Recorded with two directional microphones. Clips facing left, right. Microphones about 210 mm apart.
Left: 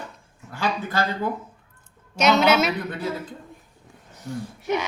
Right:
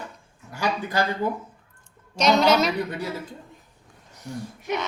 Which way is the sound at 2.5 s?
5° left (ahead or behind).